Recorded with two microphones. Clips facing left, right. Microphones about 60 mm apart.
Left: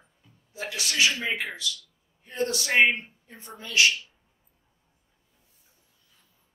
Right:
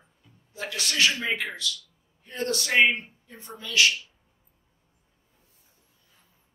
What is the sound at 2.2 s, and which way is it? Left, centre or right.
A man's voice, left.